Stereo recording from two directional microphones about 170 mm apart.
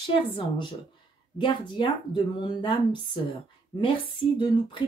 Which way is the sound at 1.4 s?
30° left (ahead or behind).